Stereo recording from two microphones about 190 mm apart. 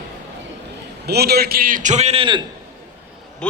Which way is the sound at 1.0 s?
55° right (ahead or behind).